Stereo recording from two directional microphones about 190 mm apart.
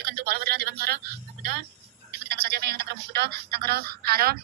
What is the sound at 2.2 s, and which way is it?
A woman's voice, 55° right (ahead or behind).